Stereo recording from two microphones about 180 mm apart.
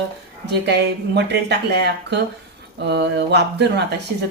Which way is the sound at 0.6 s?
70° right (ahead or behind).